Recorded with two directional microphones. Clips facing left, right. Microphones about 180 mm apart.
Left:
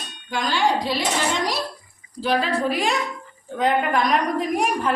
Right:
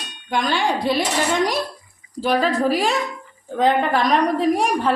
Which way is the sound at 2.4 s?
40° right (ahead or behind).